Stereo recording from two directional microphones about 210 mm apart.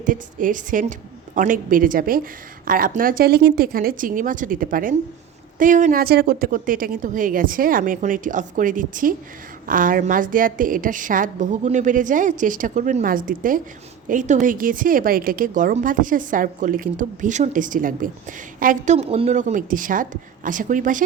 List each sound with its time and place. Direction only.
0.0 s a woman's voice: 40° right (ahead or behind)